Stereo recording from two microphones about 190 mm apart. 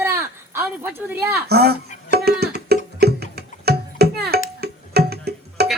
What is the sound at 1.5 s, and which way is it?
Speech, 55° right (ahead or behind).